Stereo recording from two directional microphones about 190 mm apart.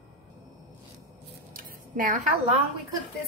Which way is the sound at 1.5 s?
45° right (ahead or behind).